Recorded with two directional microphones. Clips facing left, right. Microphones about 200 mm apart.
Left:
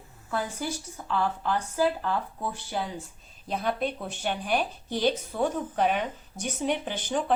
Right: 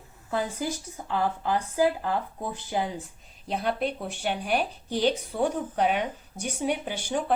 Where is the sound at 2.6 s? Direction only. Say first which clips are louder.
Right 3 dB; 15° right (ahead or behind).